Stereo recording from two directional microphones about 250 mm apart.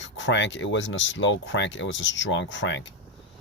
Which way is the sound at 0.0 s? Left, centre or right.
Left.